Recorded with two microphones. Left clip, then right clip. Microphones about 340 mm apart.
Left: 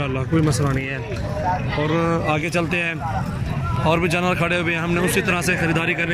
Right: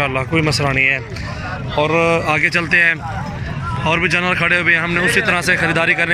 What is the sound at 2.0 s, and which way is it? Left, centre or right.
Speech, centre.